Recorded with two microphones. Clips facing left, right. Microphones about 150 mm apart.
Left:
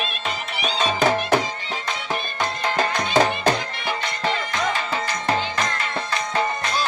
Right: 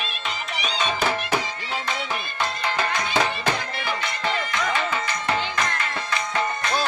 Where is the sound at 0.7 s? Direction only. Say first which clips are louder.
Left 5 dB; 35° left (ahead or behind).